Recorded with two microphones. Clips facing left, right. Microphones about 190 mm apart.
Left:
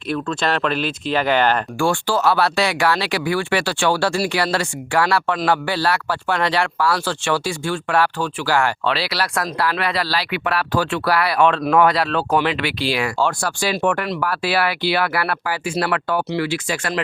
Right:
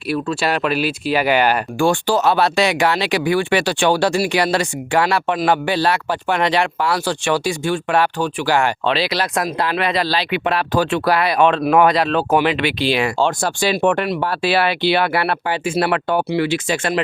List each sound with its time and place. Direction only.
0.1 s speech: 10° right (ahead or behind); by 17.0 s 25° right (ahead or behind)